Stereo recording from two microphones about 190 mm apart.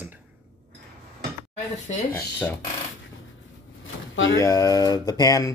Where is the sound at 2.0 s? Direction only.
10° left (ahead or behind).